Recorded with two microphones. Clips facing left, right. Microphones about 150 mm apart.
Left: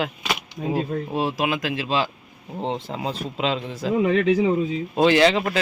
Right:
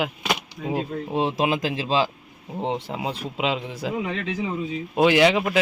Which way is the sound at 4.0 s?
55° left (ahead or behind).